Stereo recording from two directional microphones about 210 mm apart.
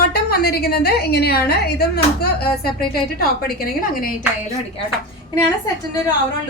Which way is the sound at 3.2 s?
45° left (ahead or behind).